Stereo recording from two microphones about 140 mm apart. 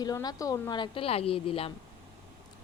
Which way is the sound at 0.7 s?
35° left (ahead or behind).